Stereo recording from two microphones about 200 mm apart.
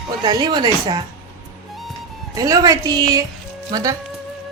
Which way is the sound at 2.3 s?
20° right (ahead or behind).